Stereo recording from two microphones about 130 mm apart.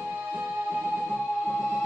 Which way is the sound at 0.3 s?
10° right (ahead or behind).